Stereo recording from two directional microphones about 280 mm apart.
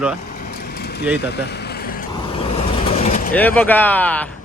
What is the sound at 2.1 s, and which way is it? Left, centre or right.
Vehicle, centre.